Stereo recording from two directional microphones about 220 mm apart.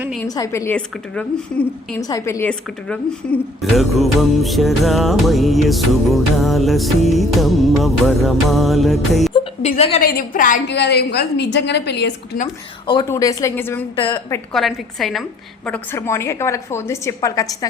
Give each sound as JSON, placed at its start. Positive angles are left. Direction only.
{"t": 0.3, "sound": "a woman's voice", "side_deg": 15}
{"t": 2.0, "sound": "a woman's voice", "side_deg": 15}
{"t": 3.6, "sound": "music", "side_deg": 0}
{"t": 9.3, "sound": "a woman's voice", "side_deg": 30}
{"t": 10.0, "sound": "a woman's voice", "side_deg": 40}
{"t": 10.7, "sound": "a woman's voice", "side_deg": 50}
{"t": 12.9, "sound": "a woman's voice", "side_deg": 15}
{"t": 13.9, "sound": "a woman's voice", "side_deg": 25}
{"t": 14.5, "sound": "music", "side_deg": 0}
{"t": 15.6, "sound": "a woman's voice", "side_deg": 10}